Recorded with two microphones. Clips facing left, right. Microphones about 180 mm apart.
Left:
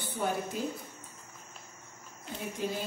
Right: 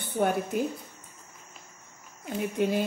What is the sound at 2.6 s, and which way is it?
Speech, 65° right (ahead or behind).